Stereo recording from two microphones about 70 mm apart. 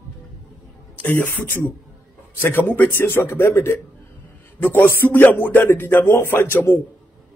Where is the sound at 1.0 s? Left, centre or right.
Left.